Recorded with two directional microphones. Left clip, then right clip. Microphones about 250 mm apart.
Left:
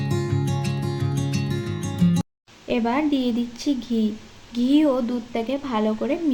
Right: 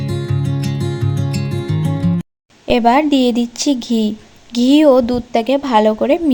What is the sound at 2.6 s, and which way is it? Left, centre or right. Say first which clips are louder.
Speech: right 11 dB; right.